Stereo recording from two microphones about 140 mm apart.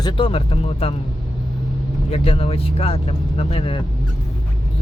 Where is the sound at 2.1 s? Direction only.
45° left (ahead or behind).